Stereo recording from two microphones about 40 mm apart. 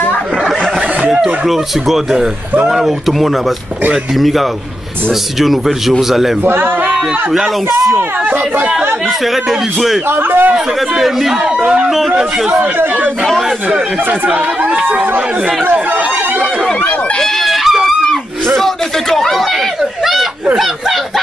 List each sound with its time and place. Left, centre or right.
1.2 s speech: centre
6.4 s speech: right
7.9 s speech: right
9.2 s speech: centre
10.0 s speech: right
11.0 s speech: centre
11.4 s speech: right
14.2 s speech: right
15.7 s chatter: right
17.2 s a sound: centre
18.6 s speech: centre
20.5 s speech: centre